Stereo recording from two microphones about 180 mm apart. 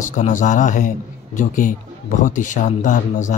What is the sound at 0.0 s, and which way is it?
A man's voice, 45° left (ahead or behind).